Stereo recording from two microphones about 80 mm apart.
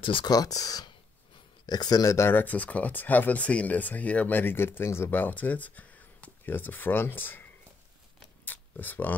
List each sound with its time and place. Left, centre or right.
0.0 s speech: left
0.3 s speech: left
2.1 s speech: left
8.5 s a sound: left